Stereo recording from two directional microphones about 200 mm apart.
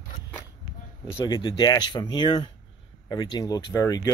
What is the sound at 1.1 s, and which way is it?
Speech, 20° left (ahead or behind).